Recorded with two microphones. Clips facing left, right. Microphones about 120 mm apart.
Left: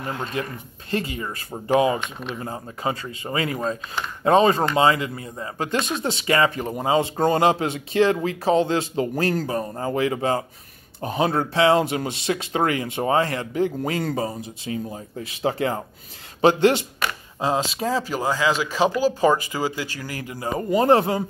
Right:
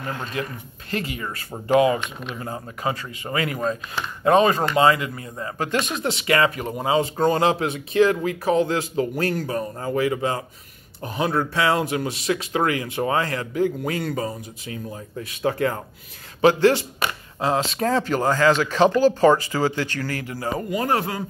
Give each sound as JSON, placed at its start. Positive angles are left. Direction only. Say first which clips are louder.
{"t": 0.4, "sound": "speech", "louder": "even", "side_deg": 30}
{"t": 17.6, "sound": "speech", "louder": "right 3 dB", "side_deg": 0}